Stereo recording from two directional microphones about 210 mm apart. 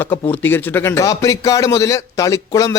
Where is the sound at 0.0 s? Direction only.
10° left (ahead or behind).